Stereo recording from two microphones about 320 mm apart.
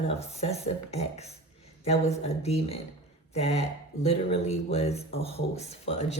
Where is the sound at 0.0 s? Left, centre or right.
Centre.